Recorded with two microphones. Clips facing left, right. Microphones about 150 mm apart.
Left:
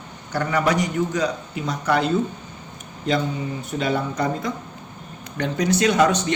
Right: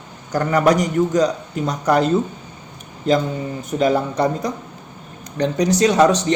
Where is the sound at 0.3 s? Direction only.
40° right (ahead or behind).